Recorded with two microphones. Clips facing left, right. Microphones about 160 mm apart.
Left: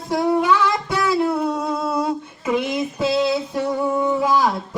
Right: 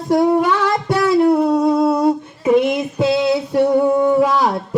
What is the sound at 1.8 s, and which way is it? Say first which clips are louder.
Female singing: right 7 dB; 55° right (ahead or behind).